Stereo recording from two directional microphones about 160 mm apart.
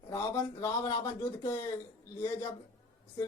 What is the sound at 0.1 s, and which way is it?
Speech, 20° left (ahead or behind).